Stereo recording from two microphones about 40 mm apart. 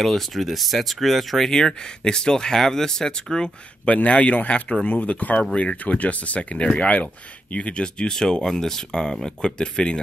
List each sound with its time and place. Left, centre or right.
0.0 s speech: centre
1.5 s speech: centre
3.8 s speech: left
8.1 s speech: centre